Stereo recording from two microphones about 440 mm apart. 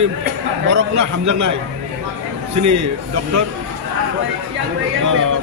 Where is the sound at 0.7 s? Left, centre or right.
Right.